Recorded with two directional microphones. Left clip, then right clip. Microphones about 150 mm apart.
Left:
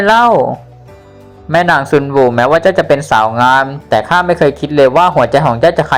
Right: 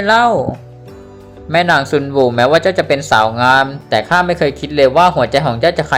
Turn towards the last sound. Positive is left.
turn(degrees=0)  # may be behind; listen again after turning